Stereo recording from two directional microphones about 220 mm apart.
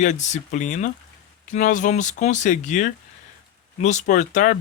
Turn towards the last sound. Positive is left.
turn(degrees=35)  # may be behind; listen again after turning